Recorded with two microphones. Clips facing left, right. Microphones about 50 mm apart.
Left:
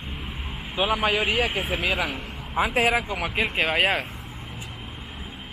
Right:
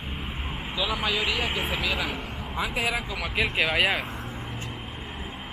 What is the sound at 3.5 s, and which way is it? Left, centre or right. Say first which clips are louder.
Speech: left 2 dB; left.